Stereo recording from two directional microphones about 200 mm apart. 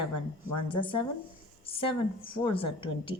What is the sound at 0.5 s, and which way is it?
A woman's voice, 25° left (ahead or behind).